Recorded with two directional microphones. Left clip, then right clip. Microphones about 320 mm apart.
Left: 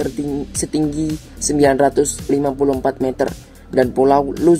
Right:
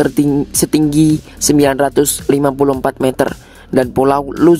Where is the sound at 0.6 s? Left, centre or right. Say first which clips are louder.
Right 7 dB; right.